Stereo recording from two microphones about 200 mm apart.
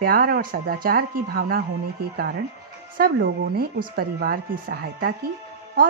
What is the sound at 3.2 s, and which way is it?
Speech, 50° right (ahead or behind).